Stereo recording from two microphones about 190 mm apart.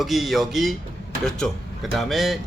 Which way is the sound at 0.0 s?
Centre (ahead or behind).